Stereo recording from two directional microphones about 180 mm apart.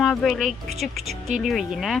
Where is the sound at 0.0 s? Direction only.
Centre (ahead or behind).